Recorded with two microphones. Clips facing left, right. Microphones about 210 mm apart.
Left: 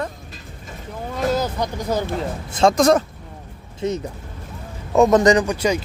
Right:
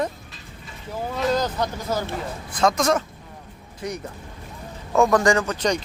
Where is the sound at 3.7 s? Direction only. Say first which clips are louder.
Left 7 dB; 25° left (ahead or behind).